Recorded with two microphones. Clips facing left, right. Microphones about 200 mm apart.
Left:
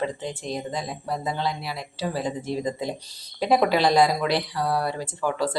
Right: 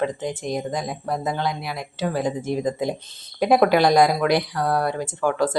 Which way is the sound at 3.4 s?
55° right (ahead or behind).